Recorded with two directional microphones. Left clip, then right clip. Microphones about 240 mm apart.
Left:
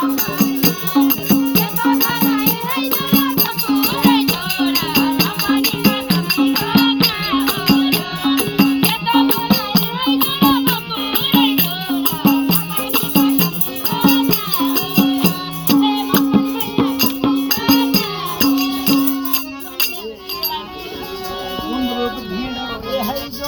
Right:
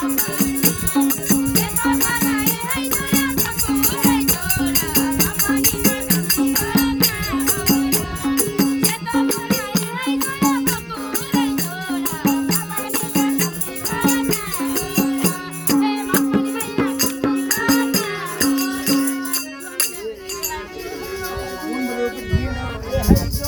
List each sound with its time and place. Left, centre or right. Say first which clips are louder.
0.0 s music: left 4 dB; right
21.7 s music: left 2 dB; right